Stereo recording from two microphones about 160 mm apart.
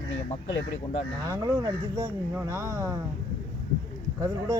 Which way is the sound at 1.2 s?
25° right (ahead or behind).